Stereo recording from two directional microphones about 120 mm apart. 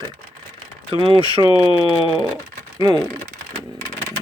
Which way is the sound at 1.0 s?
45° right (ahead or behind).